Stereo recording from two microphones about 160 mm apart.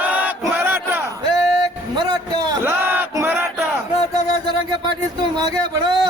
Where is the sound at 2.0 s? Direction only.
25° right (ahead or behind).